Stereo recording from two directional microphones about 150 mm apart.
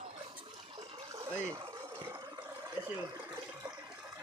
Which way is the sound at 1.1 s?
20° right (ahead or behind).